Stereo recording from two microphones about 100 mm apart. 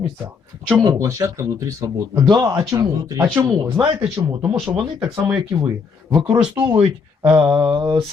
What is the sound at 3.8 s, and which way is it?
Speech, 5° right (ahead or behind).